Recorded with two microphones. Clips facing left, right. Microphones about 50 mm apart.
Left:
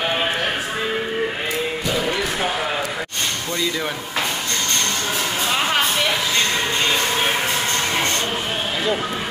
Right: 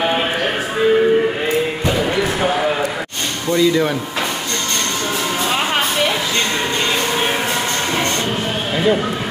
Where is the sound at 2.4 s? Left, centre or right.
Centre.